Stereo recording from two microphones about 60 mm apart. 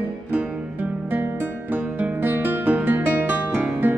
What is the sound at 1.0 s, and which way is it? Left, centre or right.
Music, right.